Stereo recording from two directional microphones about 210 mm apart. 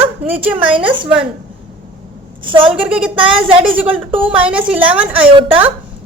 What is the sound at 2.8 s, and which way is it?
A woman's voice, 5° right (ahead or behind).